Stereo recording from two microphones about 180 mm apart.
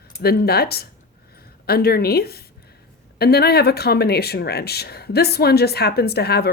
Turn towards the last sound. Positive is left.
turn(degrees=60)  # may be behind; listen again after turning